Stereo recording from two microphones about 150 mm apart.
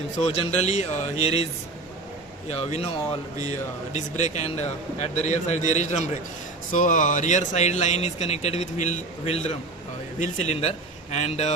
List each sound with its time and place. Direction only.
0.2 s speech: 50° left (ahead or behind)
2.5 s speech: 45° left (ahead or behind)
3.9 s speech: 50° left (ahead or behind)